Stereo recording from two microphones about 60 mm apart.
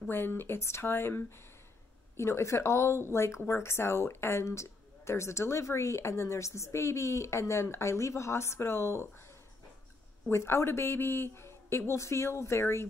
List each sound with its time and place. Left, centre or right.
0.1 s speech: left
2.1 s speech: left
10.3 s speech: left